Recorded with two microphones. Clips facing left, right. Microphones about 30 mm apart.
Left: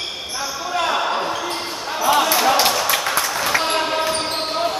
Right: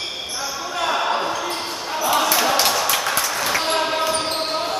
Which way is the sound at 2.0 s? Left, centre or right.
Centre.